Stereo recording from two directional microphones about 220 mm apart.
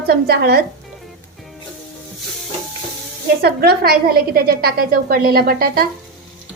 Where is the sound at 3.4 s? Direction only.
45° right (ahead or behind).